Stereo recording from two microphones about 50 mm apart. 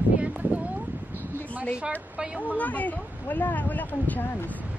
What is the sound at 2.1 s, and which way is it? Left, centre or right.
Speech, centre.